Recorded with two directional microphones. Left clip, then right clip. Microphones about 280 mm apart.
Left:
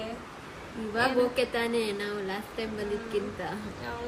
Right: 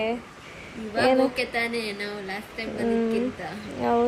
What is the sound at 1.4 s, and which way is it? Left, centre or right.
A woman's voice, centre.